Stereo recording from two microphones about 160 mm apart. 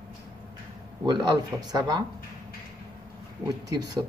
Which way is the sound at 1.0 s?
25° right (ahead or behind).